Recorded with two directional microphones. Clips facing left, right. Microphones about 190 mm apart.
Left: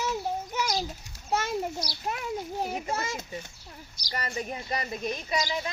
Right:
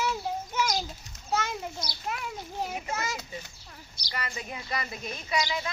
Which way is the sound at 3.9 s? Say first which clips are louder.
Left 4 dB; 40° left (ahead or behind).